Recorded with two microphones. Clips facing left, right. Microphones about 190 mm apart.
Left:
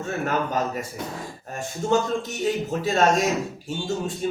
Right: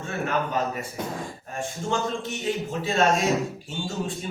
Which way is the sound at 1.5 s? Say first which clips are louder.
Left 5 dB; 40° left (ahead or behind).